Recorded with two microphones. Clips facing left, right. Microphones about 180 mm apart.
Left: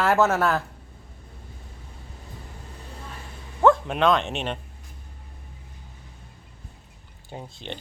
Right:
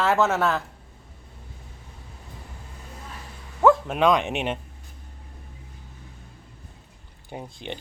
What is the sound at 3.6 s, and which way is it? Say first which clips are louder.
Speech: even; 5° right (ahead or behind).